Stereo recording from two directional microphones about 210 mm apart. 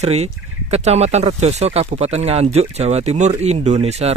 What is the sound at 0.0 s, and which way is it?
Speech, 30° right (ahead or behind).